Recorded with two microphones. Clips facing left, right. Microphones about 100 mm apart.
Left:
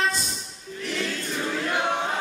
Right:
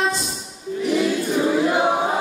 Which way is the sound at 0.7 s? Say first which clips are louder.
Right 10 dB; 10° right (ahead or behind).